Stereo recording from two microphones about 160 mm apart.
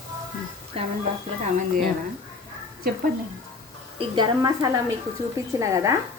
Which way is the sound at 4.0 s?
30° right (ahead or behind).